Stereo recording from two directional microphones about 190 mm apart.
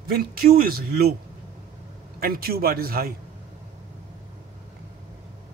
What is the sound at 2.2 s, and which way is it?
Speech, 50° right (ahead or behind).